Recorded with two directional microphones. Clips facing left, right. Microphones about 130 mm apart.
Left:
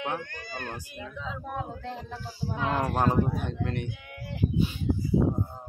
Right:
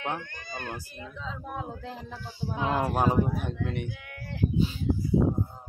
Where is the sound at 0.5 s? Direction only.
15° right (ahead or behind).